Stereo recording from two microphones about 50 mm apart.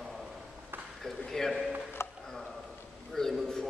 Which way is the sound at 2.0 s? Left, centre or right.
Left.